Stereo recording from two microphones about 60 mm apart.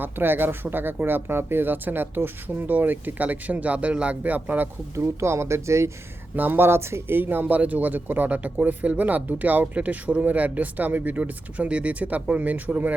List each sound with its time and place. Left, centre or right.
0.0 s speech: right
4.9 s speech: right
6.3 s speech: right